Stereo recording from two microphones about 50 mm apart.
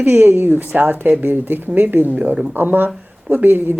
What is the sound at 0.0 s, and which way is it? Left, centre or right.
Speech, right.